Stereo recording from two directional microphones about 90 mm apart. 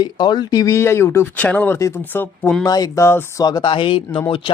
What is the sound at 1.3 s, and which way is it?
Speech, 15° left (ahead or behind).